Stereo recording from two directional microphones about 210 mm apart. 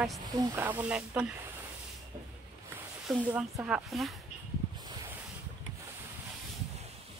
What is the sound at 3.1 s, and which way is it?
Speech, 5° right (ahead or behind).